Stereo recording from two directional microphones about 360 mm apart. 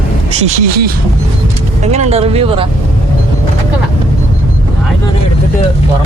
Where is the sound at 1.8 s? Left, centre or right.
Centre.